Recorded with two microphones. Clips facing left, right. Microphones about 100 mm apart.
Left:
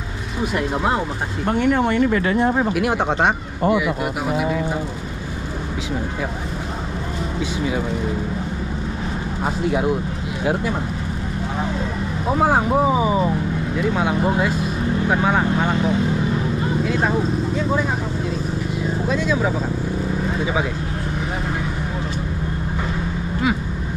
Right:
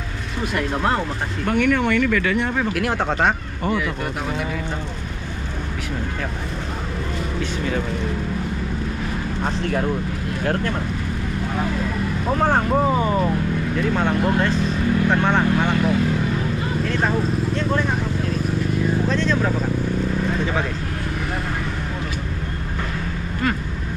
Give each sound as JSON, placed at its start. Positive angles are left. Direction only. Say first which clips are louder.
{"t": 0.4, "sound": "speech", "louder": "left 1 dB", "side_deg": 10}
{"t": 1.4, "sound": "speech", "louder": "left 1 dB", "side_deg": 25}
{"t": 2.7, "sound": "speech", "louder": "left 2 dB", "side_deg": 5}
{"t": 7.3, "sound": "speech", "louder": "left 2 dB", "side_deg": 10}
{"t": 9.4, "sound": "speech", "louder": "left 3 dB", "side_deg": 10}
{"t": 12.3, "sound": "speech", "louder": "left 2 dB", "side_deg": 10}
{"t": 19.0, "sound": "speech", "louder": "even", "side_deg": 10}